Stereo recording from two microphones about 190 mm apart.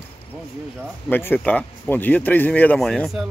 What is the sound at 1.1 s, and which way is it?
Speech, 10° left (ahead or behind).